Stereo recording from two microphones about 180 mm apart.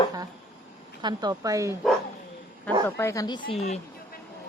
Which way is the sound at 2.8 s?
15° left (ahead or behind).